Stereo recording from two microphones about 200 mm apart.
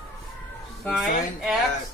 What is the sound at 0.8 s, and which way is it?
Speech, centre (ahead or behind).